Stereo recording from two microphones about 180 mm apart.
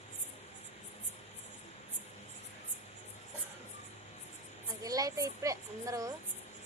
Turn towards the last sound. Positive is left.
turn(degrees=-20)  # may be behind; listen again after turning